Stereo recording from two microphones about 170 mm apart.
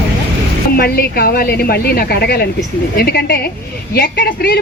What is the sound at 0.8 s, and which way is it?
A woman's voice, 60° left (ahead or behind).